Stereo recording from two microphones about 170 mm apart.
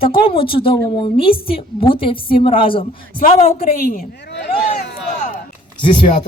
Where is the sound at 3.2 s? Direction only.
45° left (ahead or behind); by 4.6 s 85° left.